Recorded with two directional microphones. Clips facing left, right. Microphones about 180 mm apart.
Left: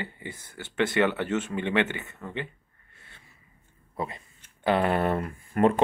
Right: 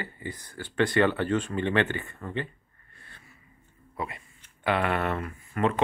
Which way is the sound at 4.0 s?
35° left (ahead or behind).